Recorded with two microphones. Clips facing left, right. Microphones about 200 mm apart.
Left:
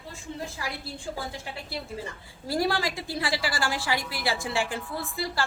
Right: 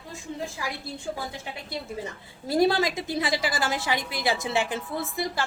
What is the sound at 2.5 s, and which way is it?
A woman's voice, 20° right (ahead or behind).